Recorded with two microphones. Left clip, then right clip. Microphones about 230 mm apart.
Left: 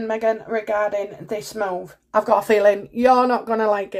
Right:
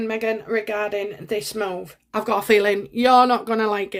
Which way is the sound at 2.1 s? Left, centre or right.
Right.